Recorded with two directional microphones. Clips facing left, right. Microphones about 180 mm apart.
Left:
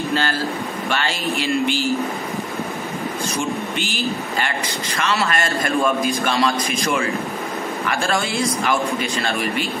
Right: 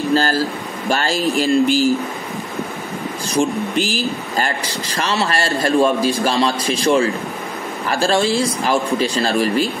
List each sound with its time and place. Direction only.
0.1 s a sound: 40° right (ahead or behind)
0.8 s speech: 40° right (ahead or behind)
3.3 s speech: 35° right (ahead or behind)